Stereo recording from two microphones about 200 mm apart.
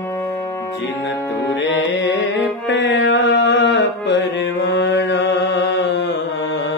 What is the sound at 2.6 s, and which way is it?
Music, 60° left (ahead or behind).